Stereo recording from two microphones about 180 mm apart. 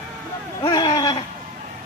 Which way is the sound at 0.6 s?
25° left (ahead or behind).